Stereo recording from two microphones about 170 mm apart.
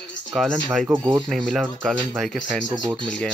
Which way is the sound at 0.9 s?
20° right (ahead or behind).